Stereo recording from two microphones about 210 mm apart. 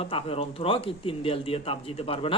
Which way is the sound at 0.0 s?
25° left (ahead or behind).